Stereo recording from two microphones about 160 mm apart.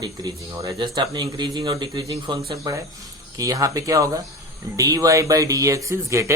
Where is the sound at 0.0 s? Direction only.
25° right (ahead or behind).